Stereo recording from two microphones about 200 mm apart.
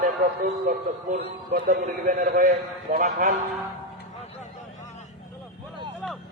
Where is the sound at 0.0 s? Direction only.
45° right (ahead or behind).